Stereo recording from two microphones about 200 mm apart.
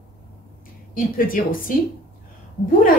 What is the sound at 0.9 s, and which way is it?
Speech, 45° left (ahead or behind).